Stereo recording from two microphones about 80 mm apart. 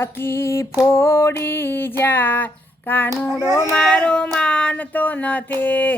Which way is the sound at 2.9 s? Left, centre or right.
Left.